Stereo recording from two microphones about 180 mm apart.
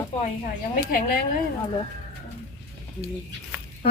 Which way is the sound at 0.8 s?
55° left (ahead or behind).